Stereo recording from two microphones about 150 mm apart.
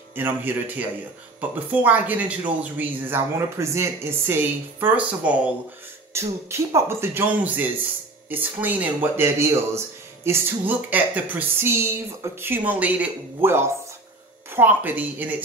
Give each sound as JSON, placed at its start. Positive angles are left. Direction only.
{"t": 0.1, "sound": "speech", "side_deg": -15}